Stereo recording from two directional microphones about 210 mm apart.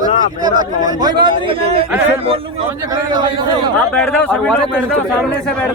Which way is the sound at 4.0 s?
5° left (ahead or behind).